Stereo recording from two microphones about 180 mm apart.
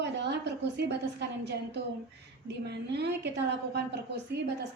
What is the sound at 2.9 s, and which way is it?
Speech, 70° right (ahead or behind).